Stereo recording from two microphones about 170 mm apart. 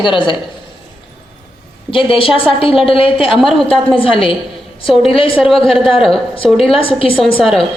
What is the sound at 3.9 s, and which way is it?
A woman's voice, 30° left (ahead or behind).